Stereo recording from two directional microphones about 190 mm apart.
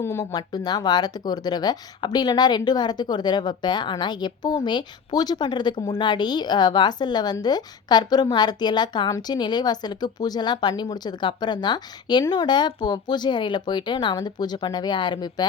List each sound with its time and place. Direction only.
0.0 s speech: 15° left (ahead or behind)